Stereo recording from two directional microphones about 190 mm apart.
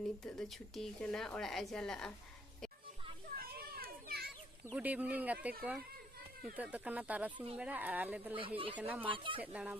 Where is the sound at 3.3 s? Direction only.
50° right (ahead or behind).